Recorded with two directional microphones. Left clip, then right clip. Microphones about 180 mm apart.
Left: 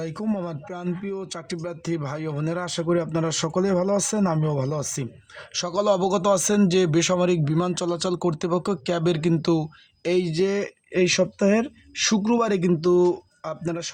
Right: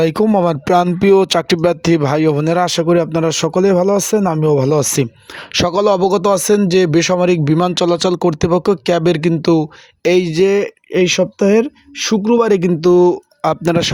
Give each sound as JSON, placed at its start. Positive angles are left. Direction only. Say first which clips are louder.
{"t": 0.0, "sound": "speech", "louder": "right 17 dB", "side_deg": -50}
{"t": 13.4, "sound": "speech", "louder": "right 15 dB", "side_deg": -50}